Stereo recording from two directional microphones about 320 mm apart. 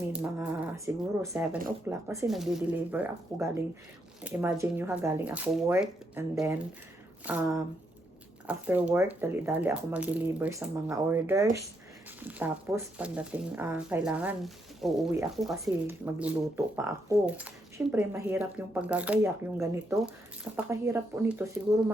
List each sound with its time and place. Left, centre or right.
0.1 s speech: centre